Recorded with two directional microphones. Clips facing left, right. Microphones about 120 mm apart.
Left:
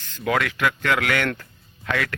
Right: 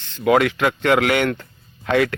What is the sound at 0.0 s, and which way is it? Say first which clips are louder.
A man's voice: right 7 dB; 25° right (ahead or behind).